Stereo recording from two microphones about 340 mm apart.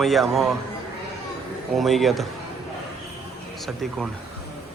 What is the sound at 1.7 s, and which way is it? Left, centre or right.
Speech, centre.